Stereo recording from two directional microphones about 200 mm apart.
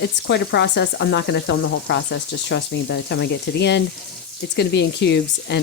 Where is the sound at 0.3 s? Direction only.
60° left (ahead or behind).